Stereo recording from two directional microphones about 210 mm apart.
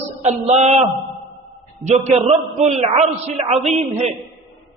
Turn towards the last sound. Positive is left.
turn(degrees=-30)  # may be behind; listen again after turning